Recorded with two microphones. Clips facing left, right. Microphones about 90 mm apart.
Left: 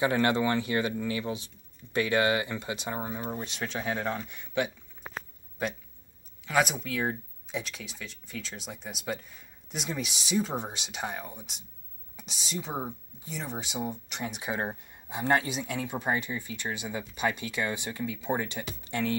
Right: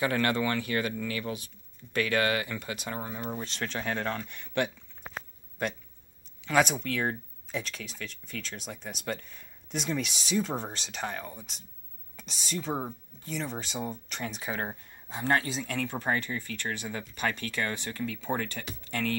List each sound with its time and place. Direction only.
0.0 s speech: 20° left (ahead or behind)
6.4 s speech: 5° left (ahead or behind); by 19.1 s 20° left (ahead or behind)